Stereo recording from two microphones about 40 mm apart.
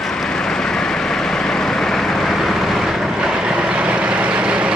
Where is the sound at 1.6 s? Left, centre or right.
Centre.